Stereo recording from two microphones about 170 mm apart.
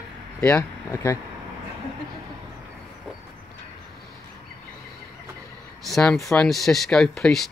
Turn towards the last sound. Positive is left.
turn(degrees=0)  # may be behind; listen again after turning